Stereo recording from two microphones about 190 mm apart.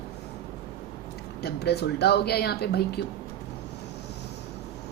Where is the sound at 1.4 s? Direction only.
60° left (ahead or behind).